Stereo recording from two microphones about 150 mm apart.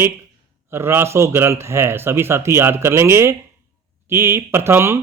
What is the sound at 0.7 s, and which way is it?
Speech, 15° right (ahead or behind).